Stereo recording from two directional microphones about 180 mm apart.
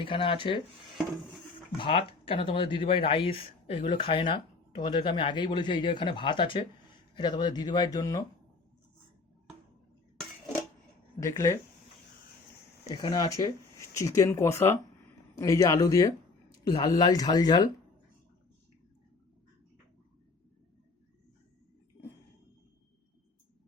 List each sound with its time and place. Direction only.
0.0 s speech: 30° left (ahead or behind)
1.8 s speech: 30° left (ahead or behind)
11.2 s speech: 15° left (ahead or behind)
12.9 s speech: 25° left (ahead or behind)